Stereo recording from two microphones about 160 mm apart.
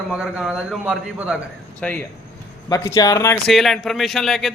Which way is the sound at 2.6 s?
20° left (ahead or behind).